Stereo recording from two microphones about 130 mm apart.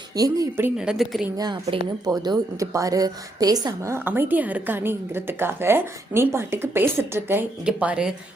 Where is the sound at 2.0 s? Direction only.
30° right (ahead or behind).